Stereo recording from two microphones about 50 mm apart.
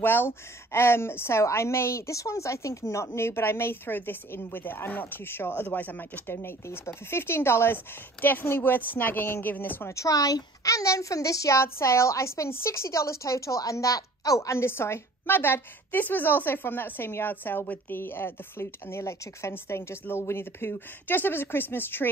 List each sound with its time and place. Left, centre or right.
0.0 s speech: left
1.4 s speech: left
6.2 s speech: left
10.6 s a woman's voice: left
12.4 s a woman's voice: left
14.5 s speech: left